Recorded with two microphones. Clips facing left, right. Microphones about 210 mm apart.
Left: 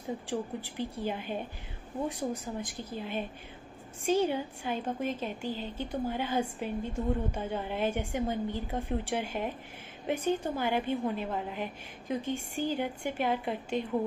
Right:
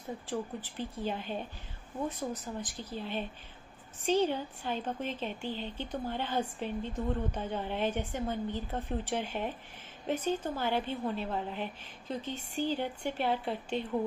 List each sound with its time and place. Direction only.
0.3 s a woman's voice: 10° left (ahead or behind)
5.4 s a woman's voice: 40° left (ahead or behind)
5.8 s a woman's voice: 10° left (ahead or behind)